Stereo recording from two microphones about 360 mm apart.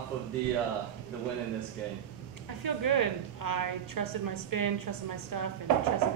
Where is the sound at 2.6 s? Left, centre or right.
Right.